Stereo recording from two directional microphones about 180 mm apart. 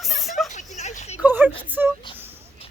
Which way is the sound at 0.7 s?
40° left (ahead or behind).